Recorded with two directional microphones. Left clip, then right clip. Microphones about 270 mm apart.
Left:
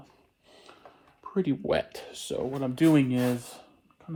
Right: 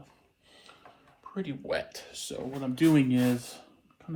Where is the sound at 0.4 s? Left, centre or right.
Left.